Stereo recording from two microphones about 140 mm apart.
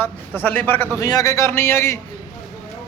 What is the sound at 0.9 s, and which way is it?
A man's voice, 25° left (ahead or behind).